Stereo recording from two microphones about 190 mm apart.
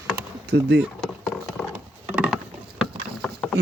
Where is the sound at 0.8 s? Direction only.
Centre (ahead or behind).